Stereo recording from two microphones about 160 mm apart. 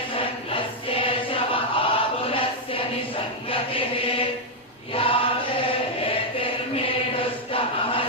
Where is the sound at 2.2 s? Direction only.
35° left (ahead or behind).